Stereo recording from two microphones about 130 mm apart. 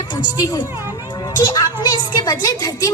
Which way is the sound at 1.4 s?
30° left (ahead or behind).